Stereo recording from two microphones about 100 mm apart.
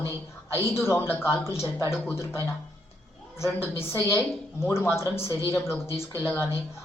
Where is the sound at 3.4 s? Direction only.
30° left (ahead or behind).